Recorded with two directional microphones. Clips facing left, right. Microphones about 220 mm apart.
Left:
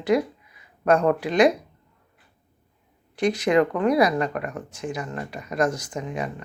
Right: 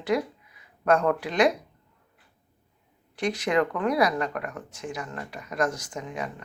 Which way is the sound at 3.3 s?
15° left (ahead or behind).